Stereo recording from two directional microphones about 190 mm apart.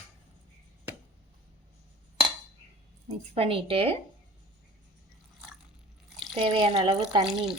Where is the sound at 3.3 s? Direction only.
30° right (ahead or behind).